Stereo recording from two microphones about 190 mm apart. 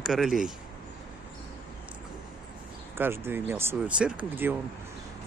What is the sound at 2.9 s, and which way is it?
Speech, 10° right (ahead or behind).